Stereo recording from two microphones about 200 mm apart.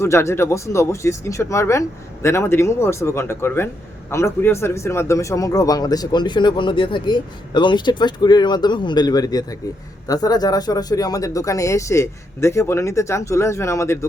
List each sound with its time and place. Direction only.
0.0 s speech: 15° left (ahead or behind)